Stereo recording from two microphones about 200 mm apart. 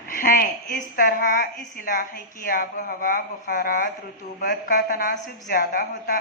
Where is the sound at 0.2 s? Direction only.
45° left (ahead or behind).